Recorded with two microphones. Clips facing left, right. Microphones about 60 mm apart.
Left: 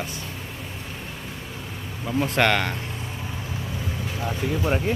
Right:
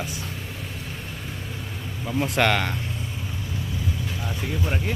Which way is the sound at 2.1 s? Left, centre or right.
Centre.